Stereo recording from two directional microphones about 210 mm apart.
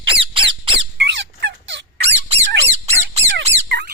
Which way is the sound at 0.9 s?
60° right (ahead or behind).